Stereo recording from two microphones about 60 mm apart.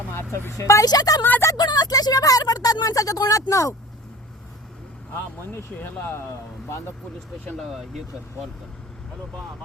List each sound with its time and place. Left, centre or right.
0.1 s speech: left
1.2 s speech: left
1.5 s a sound: left
5.5 s speech: left
7.6 s speech: centre